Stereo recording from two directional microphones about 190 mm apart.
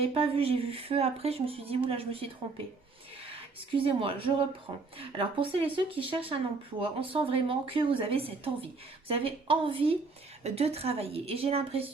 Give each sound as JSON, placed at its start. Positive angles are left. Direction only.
{"t": 0.0, "sound": "speech", "side_deg": -30}
{"t": 3.8, "sound": "speech", "side_deg": -30}